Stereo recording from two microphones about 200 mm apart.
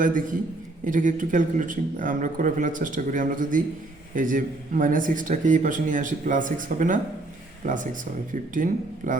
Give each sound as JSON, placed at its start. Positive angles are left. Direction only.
{"t": 0.9, "sound": "a man's voice", "side_deg": -40}